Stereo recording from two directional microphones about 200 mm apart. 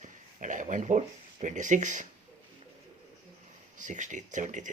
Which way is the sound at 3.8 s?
40° right (ahead or behind).